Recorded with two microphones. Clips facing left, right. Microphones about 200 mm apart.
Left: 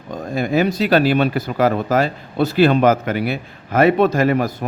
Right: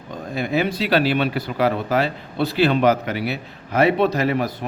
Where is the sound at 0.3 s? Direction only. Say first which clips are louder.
Left 4 dB; 45° left (ahead or behind).